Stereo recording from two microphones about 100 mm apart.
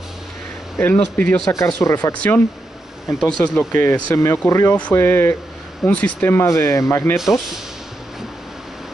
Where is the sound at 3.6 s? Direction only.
20° left (ahead or behind).